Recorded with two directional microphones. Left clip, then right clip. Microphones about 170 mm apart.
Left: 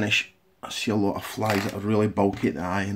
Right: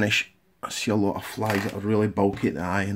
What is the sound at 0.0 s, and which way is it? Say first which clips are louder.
Speech: even; 20° right (ahead or behind).